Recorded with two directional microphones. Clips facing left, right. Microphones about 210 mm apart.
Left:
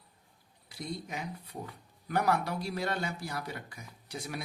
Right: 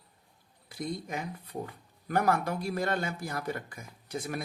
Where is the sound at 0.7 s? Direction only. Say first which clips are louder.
Right 4 dB; 50° right (ahead or behind).